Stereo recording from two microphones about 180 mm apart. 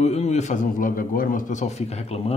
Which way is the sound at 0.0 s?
35° left (ahead or behind).